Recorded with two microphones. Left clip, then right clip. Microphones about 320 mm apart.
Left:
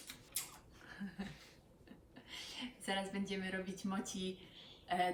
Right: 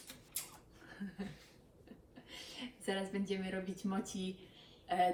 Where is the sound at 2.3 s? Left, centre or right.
Centre.